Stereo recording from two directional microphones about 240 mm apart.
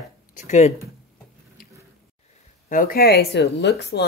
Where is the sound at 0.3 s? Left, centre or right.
Left.